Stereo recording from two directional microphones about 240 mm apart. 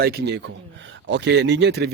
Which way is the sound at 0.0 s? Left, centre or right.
Right.